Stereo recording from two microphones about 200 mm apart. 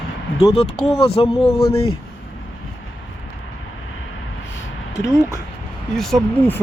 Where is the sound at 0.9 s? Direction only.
30° left (ahead or behind).